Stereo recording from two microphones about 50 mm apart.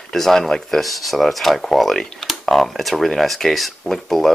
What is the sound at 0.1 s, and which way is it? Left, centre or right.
Speech, centre.